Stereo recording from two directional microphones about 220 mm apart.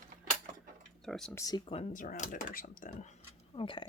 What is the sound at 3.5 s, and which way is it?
Speech, 25° left (ahead or behind).